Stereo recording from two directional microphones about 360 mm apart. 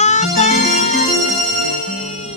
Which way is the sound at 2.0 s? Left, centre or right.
Centre.